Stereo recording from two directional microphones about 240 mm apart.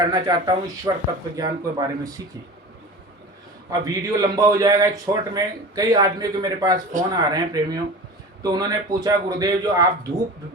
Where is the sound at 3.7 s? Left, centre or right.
Centre.